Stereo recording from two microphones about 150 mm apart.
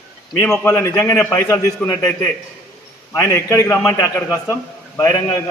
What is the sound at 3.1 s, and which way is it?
Speech, 15° left (ahead or behind).